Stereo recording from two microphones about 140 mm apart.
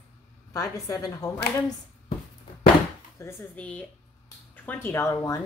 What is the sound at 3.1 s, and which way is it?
Speech, 20° left (ahead or behind).